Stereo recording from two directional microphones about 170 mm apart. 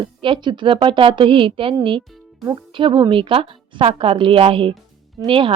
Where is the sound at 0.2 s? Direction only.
30° right (ahead or behind).